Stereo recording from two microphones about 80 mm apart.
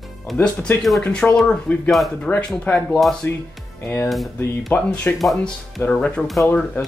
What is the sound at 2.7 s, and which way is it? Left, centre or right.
Speech, left.